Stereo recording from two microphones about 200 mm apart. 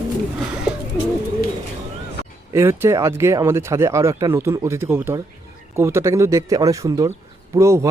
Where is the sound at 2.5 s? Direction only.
15° right (ahead or behind).